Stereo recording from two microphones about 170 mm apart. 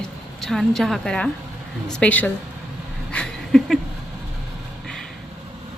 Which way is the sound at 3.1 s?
5° left (ahead or behind).